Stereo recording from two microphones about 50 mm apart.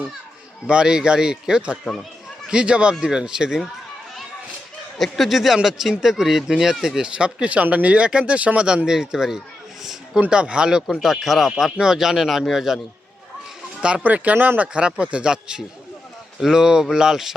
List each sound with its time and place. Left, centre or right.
0.7 s speech: centre
4.9 s speech: centre
10.2 s speech: centre
11.0 s speech: centre
14.0 s speech: right
14.7 s speech: right